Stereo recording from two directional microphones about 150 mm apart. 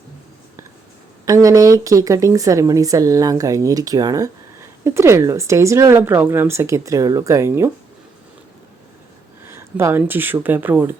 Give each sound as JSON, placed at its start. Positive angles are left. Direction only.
{"t": 1.2, "sound": "speech", "side_deg": -20}
{"t": 9.5, "sound": "speech", "side_deg": -15}